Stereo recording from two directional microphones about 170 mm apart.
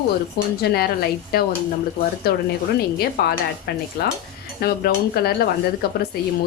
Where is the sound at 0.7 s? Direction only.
65° left (ahead or behind).